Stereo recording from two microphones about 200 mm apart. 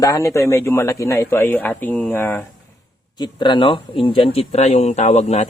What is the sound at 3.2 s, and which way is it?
Speech, 25° left (ahead or behind).